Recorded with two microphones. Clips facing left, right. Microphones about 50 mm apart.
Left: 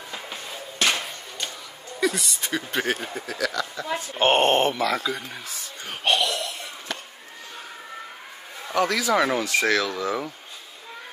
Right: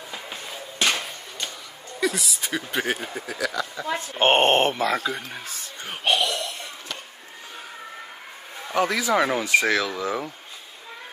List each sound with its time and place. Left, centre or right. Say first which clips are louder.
0.1 s a sound: even; centre
2.0 s speech: left 1 dB; centre
4.2 s speech: right 1 dB; right
5.9 s laughter: even; centre
8.7 s speech: even; centre